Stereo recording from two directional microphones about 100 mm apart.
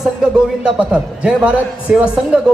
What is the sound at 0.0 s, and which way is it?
A man's voice, 10° right (ahead or behind).